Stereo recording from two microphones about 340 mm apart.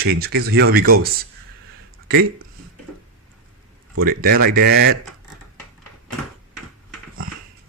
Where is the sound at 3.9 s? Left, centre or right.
Right.